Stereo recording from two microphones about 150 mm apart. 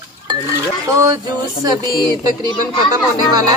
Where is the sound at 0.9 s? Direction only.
25° right (ahead or behind).